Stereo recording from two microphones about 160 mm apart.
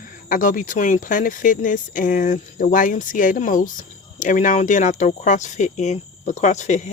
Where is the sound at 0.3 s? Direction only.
55° left (ahead or behind).